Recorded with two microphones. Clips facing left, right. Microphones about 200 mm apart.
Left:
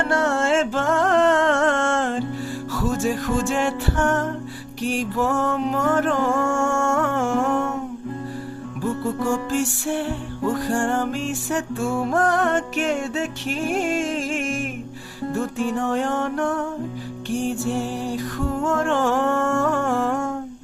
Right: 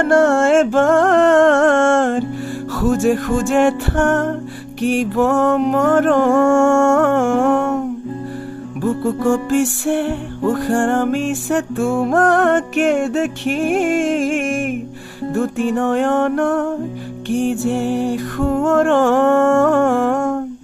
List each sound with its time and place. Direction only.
0.0 s music: 50° right (ahead or behind)
9.0 s music: 60° right (ahead or behind)